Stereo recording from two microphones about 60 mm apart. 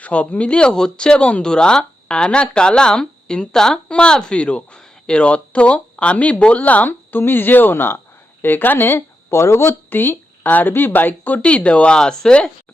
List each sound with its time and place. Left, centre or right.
0.0 s speech: left
11.4 s speech: centre